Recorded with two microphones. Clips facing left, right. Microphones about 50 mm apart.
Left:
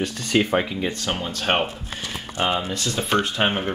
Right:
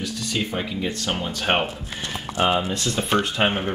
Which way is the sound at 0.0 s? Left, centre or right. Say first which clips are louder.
Left 5 dB; left.